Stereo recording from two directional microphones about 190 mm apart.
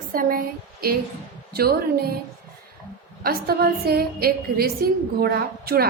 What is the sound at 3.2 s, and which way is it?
A woman's voice, 55° right (ahead or behind).